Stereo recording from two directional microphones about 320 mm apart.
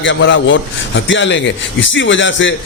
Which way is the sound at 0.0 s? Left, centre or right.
Left.